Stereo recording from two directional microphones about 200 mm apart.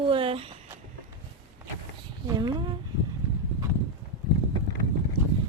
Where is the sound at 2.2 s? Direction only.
20° right (ahead or behind).